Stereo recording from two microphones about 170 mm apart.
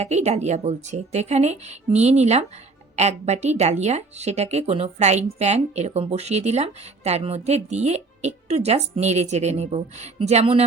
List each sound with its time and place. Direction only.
0.0 s speech: 40° right (ahead or behind)